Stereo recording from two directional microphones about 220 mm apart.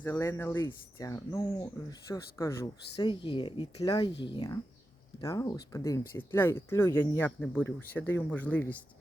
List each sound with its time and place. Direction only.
0.0 s a woman's voice: 10° left (ahead or behind)